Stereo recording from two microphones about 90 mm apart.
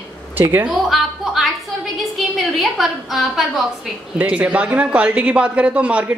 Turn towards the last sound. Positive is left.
turn(degrees=-15)  # may be behind; listen again after turning